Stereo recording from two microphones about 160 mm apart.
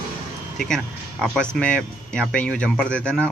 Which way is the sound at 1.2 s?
5° left (ahead or behind).